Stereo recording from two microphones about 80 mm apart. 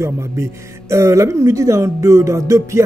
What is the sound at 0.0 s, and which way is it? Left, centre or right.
Speech, right.